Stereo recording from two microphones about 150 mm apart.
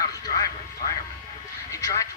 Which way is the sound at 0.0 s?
20° left (ahead or behind).